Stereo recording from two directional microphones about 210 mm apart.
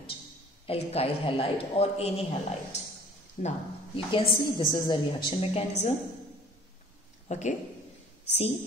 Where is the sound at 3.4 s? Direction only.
35° left (ahead or behind).